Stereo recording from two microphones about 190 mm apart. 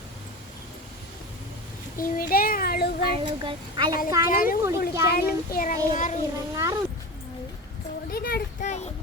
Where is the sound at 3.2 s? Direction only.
25° right (ahead or behind).